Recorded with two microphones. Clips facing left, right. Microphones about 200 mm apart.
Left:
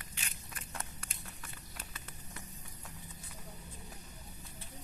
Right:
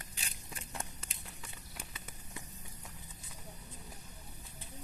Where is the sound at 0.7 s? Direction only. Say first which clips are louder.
Even; 20° right (ahead or behind).